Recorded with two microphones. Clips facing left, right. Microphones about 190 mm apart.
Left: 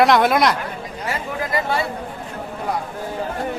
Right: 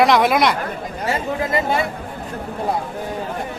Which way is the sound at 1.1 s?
25° right (ahead or behind).